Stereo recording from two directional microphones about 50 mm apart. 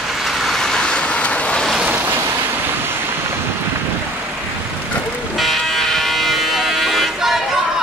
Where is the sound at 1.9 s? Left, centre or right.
Right.